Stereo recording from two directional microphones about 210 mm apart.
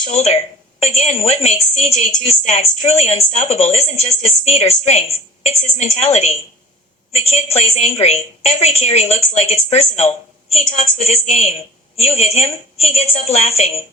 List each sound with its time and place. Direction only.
0.0 s a woman's voice: 30° left (ahead or behind)